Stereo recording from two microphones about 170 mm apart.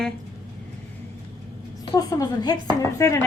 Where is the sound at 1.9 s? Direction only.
20° left (ahead or behind).